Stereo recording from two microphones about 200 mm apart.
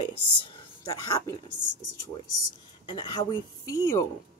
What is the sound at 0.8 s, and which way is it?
Speech, 15° left (ahead or behind).